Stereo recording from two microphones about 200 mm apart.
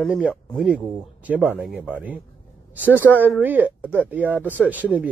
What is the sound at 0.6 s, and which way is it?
Speech, 5° right (ahead or behind).